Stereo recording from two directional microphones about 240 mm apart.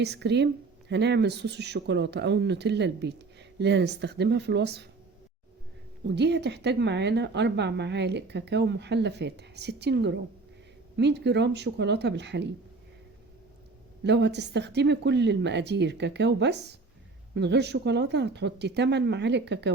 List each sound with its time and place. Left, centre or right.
0.0 s speech: right
6.1 s speech: right
14.0 s speech: right